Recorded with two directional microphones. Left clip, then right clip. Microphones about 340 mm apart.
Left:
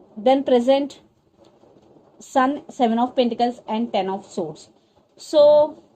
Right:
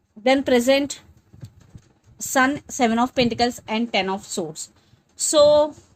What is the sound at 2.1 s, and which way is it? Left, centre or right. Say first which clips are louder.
A woman's voice: even; right.